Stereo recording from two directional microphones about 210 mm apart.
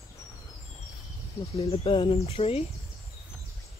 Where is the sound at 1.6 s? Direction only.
25° left (ahead or behind).